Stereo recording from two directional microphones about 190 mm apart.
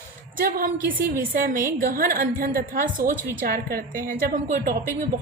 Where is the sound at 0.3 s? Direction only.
50° right (ahead or behind).